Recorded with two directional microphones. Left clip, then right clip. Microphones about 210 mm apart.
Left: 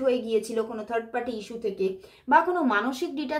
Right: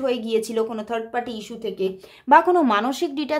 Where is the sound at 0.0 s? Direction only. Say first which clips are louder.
Right 2 dB; 40° right (ahead or behind).